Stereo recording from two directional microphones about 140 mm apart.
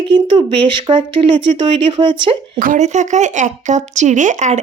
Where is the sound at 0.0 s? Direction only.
35° right (ahead or behind).